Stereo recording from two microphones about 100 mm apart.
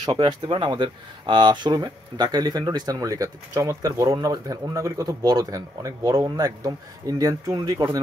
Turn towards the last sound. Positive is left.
turn(degrees=-40)  # may be behind; listen again after turning